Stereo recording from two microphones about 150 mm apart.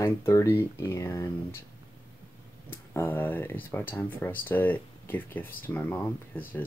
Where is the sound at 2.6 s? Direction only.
15° left (ahead or behind).